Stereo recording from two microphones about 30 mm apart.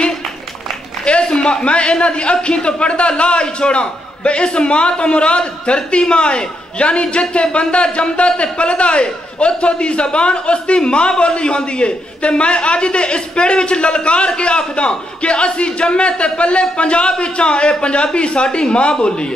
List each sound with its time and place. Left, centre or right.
1.0 s a man's voice: left